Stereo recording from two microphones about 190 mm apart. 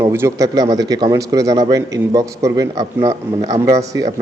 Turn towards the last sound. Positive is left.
turn(degrees=-15)  # may be behind; listen again after turning